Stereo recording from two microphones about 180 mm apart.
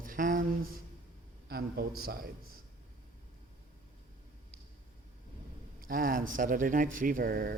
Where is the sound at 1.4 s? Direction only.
60° right (ahead or behind).